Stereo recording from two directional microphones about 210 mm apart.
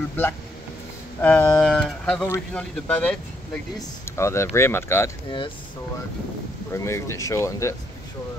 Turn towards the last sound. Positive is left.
turn(degrees=15)  # may be behind; listen again after turning